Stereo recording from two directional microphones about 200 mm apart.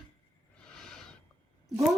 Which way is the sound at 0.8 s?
5° left (ahead or behind).